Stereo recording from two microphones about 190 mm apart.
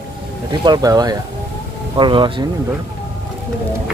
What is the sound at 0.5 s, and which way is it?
Speech, 20° right (ahead or behind).